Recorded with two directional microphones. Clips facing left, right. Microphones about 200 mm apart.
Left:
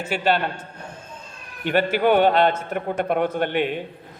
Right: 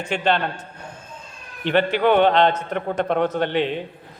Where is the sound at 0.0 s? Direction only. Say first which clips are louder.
Even; 5° left (ahead or behind).